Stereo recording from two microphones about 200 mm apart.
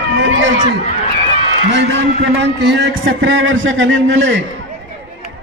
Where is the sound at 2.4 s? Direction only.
60° right (ahead or behind).